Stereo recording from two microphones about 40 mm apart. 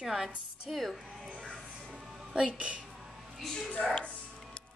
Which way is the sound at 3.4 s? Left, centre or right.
Centre.